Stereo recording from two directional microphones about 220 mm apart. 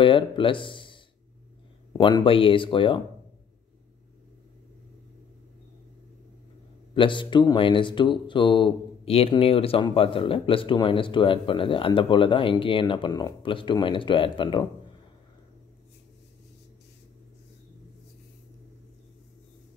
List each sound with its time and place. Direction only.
0.0 s speech: 20° left (ahead or behind)
6.9 s speech: 20° left (ahead or behind)